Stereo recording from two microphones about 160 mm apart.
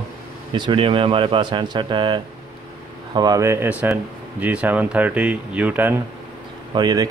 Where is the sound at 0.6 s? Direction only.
30° right (ahead or behind); by 5.9 s 10° right (ahead or behind).